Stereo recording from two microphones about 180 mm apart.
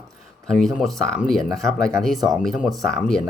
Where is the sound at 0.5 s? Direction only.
Centre (ahead or behind).